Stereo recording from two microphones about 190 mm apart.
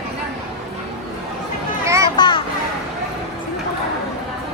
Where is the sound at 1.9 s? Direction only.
15° right (ahead or behind).